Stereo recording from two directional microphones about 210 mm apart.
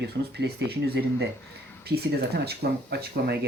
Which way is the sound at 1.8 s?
50° right (ahead or behind).